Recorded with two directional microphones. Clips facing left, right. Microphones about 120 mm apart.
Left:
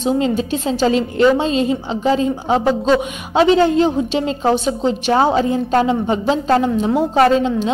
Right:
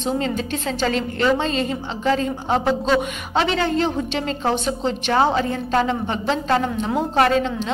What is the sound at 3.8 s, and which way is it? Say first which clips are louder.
Speech: left 5 dB; 10° left (ahead or behind).